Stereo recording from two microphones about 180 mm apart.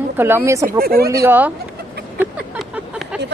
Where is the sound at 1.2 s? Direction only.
10° right (ahead or behind).